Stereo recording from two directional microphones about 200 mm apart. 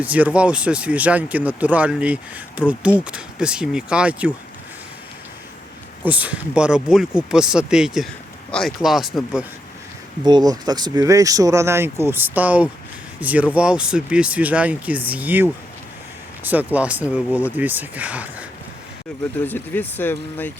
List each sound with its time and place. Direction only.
0.0 s speech: 5° right (ahead or behind)
6.0 s speech: 5° right (ahead or behind)
10.2 s speech: 20° right (ahead or behind)
19.5 s speech: 10° left (ahead or behind)